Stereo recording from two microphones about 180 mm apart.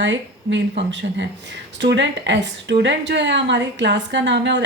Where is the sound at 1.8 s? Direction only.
75° right (ahead or behind).